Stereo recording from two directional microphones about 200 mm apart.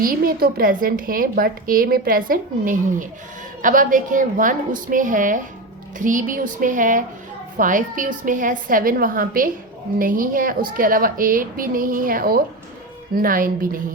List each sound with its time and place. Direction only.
0.0 s a woman's voice: 45° right (ahead or behind)